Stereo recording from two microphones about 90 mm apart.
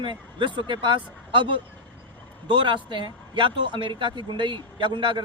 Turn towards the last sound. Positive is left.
turn(degrees=-65)  # may be behind; listen again after turning